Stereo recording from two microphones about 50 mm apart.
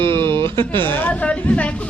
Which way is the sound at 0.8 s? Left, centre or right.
Left.